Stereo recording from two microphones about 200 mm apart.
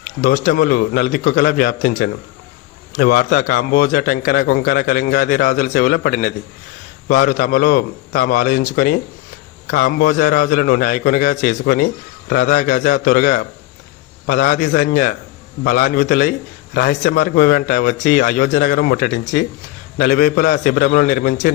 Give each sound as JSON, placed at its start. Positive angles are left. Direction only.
{"t": 0.0, "sound": "a man's voice", "side_deg": 45}
{"t": 20.0, "sound": "a man's voice", "side_deg": 50}